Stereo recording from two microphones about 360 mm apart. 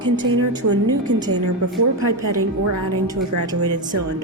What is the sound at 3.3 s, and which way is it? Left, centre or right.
Speech, right.